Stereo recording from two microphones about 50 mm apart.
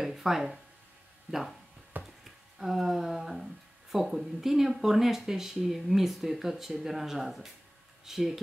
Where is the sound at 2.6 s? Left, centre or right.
Centre.